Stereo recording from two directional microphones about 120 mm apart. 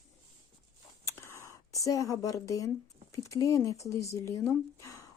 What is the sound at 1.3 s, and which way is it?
Speech, 25° left (ahead or behind).